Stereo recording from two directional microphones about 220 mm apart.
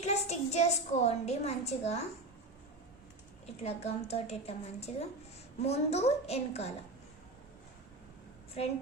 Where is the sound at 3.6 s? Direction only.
30° left (ahead or behind).